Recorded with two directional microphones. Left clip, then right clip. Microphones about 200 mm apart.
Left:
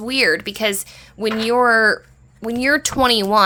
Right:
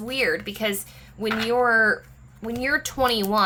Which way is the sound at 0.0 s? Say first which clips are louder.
Left 7 dB; 45° left (ahead or behind).